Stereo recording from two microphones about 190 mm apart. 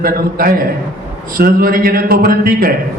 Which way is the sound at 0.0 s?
50° right (ahead or behind).